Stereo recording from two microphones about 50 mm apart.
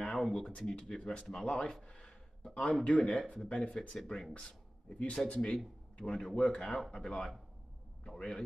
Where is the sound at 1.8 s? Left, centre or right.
Left.